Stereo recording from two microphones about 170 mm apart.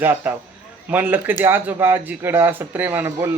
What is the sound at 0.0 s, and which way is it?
Speech, 10° right (ahead or behind).